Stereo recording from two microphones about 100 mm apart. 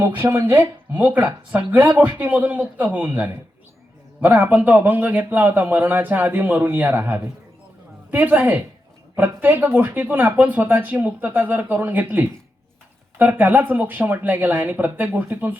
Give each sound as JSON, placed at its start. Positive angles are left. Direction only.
{"t": 0.0, "sound": "speech", "side_deg": -25}